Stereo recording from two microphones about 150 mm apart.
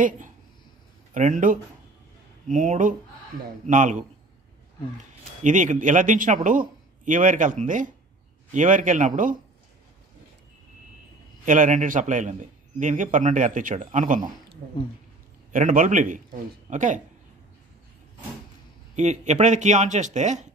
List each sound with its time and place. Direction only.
1.1 s a man's voice: 60° right (ahead or behind)
11.4 s a man's voice: 60° right (ahead or behind)
18.9 s speech: 50° right (ahead or behind)